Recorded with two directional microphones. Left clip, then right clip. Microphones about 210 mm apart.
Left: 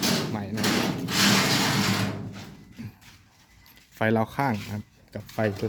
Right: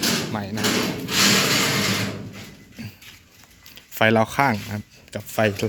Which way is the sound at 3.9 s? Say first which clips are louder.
Right 7 dB; 5° right (ahead or behind).